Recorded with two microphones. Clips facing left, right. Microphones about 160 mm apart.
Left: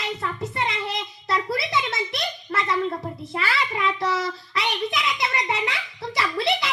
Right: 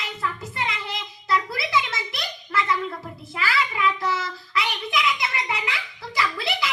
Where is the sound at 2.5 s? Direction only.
35° left (ahead or behind).